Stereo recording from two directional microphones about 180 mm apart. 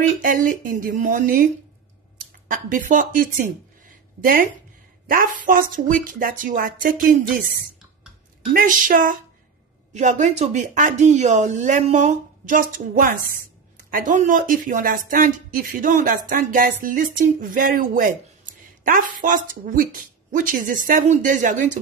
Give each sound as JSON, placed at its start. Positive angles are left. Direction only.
{"t": 0.2, "sound": "speech", "side_deg": -45}
{"t": 8.5, "sound": "speech", "side_deg": -50}